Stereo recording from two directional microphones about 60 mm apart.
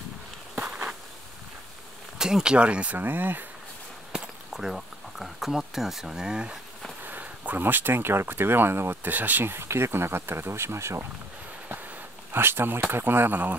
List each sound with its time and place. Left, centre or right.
0.6 s walk: right
2.1 s speech: centre
3.0 s speech: right
4.1 s speech: centre
7.0 s speech: right
12.3 s speech: right